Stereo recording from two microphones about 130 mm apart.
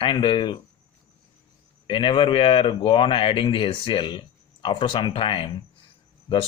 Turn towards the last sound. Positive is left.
turn(degrees=40)  # may be behind; listen again after turning